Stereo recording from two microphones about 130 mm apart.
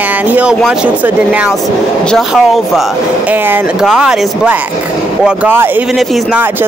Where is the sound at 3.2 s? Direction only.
15° right (ahead or behind).